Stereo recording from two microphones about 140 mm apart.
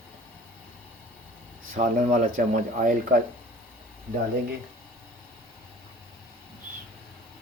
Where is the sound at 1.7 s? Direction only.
75° right (ahead or behind).